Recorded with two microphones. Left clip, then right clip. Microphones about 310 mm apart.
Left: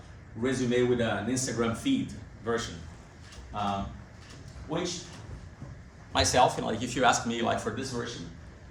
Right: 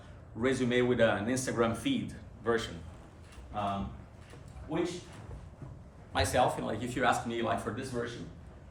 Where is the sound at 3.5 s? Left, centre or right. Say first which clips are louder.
Left 3 dB; centre.